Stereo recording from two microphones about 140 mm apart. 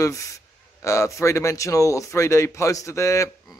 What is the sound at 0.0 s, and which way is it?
Speech, 20° left (ahead or behind).